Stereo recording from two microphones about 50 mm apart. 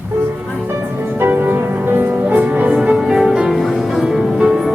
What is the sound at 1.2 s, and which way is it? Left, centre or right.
Music, right.